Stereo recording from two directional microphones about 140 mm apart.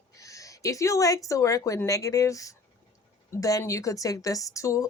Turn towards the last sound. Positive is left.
turn(degrees=20)  # may be behind; listen again after turning